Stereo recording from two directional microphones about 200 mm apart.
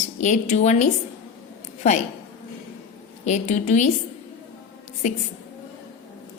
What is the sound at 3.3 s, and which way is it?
Speech, 35° left (ahead or behind).